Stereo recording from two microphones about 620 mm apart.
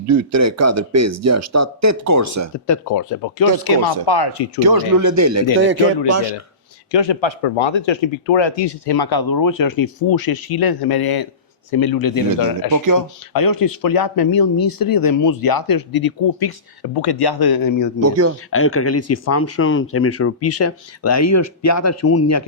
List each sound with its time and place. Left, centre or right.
0.1 s speech: right
2.6 s speech: left
4.6 s speech: right
6.9 s speech: left
12.7 s speech: right
13.3 s speech: left
18.0 s speech: right
18.5 s speech: left